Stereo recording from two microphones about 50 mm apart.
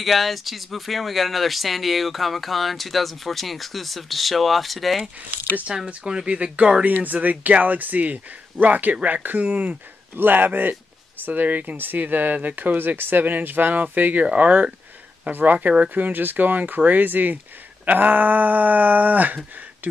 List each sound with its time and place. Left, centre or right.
0.0 s speech: centre
5.9 s speech: centre
6.8 s speech: right
14.2 s speech: right